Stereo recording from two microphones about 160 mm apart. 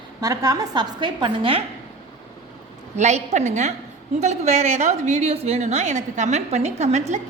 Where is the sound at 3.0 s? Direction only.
45° right (ahead or behind).